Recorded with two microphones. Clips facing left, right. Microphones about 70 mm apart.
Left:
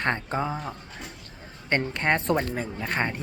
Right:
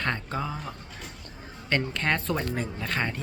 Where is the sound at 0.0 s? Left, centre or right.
Left.